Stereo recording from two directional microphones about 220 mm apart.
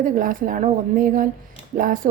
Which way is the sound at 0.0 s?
40° right (ahead or behind).